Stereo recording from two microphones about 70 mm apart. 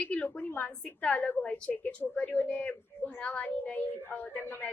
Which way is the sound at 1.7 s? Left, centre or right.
Left.